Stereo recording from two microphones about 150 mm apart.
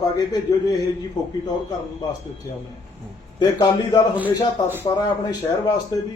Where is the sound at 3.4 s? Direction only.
25° left (ahead or behind).